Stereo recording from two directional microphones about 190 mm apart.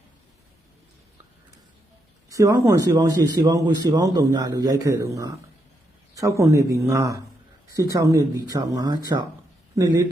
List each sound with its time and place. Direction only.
2.3 s speech: 15° right (ahead or behind)